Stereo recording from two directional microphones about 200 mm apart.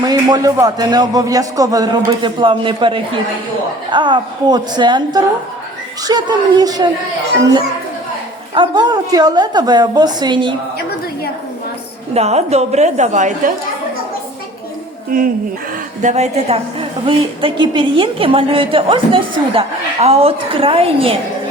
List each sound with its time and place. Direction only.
0.0 s a woman's voice: 20° right (ahead or behind)
8.5 s a woman's voice: 20° right (ahead or behind)
12.1 s a woman's voice: 30° right (ahead or behind)
15.1 s a woman's voice: 45° right (ahead or behind); by 21.2 s 30° right (ahead or behind)